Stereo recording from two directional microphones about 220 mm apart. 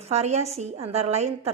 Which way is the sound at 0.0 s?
30° right (ahead or behind).